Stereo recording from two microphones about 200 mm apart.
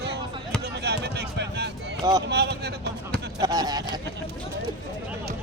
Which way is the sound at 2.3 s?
55° right (ahead or behind).